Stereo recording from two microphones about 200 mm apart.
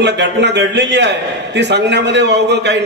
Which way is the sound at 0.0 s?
60° right (ahead or behind).